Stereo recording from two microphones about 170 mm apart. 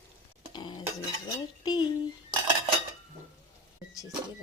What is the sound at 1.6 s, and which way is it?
Speech, 25° left (ahead or behind).